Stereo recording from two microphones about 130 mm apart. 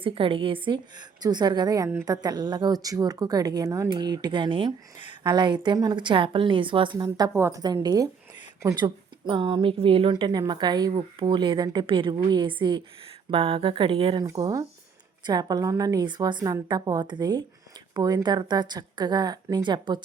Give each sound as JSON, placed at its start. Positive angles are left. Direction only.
{"t": 0.0, "sound": "speech", "side_deg": -45}
{"t": 7.3, "sound": "a woman's voice", "side_deg": -20}
{"t": 7.6, "sound": "speech", "side_deg": -30}
{"t": 15.3, "sound": "speech", "side_deg": -30}